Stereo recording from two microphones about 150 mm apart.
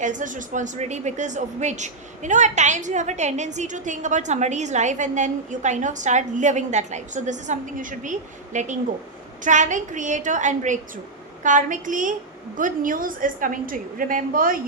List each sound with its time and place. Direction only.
0.0 s a woman's voice: 55° right (ahead or behind)